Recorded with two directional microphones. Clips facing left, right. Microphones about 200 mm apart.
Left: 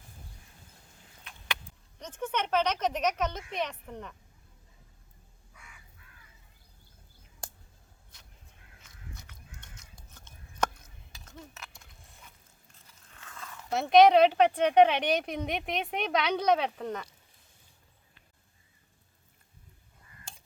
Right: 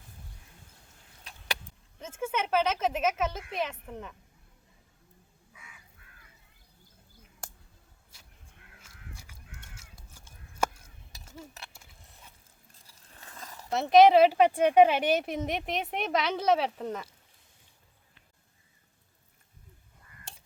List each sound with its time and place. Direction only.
1.2 s vehicle: 35° right (ahead or behind)
2.0 s speech: 5° right (ahead or behind)
8.9 s crow: 65° right (ahead or behind)
9.6 s crow: 10° right (ahead or behind)
11.7 s a sound: 5° right (ahead or behind)
12.9 s a sound: 35° right (ahead or behind)
13.7 s speech: centre (ahead or behind)